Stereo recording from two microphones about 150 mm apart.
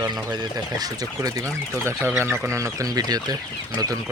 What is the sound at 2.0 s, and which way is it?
Speech, 15° right (ahead or behind).